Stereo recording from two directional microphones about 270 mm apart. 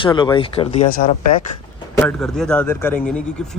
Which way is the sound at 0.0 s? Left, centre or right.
Centre.